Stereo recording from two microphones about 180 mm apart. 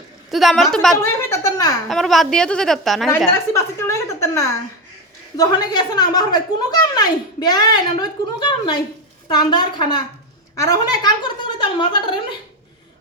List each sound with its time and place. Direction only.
0.3 s a woman's voice: centre (ahead or behind)
1.0 s speech: 20° left (ahead or behind)
1.9 s a woman's voice: centre (ahead or behind)
3.5 s a woman's voice: 15° left (ahead or behind)